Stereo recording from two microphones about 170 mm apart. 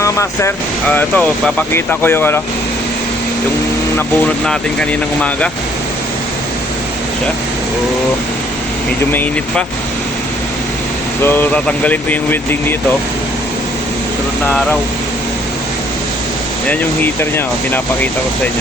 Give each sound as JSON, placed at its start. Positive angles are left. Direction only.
{"t": 0.0, "sound": "speech", "side_deg": 15}
{"t": 4.4, "sound": "speech", "side_deg": 5}
{"t": 11.2, "sound": "speech", "side_deg": 10}
{"t": 14.4, "sound": "speech", "side_deg": 10}
{"t": 16.6, "sound": "speech", "side_deg": 10}